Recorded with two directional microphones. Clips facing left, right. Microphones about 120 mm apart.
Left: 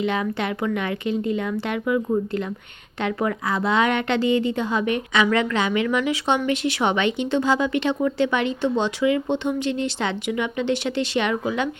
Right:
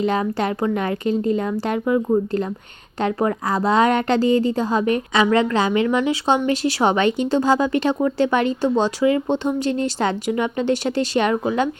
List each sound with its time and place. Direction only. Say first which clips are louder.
0.0 s a woman's voice: right 3 dB; 40° right (ahead or behind)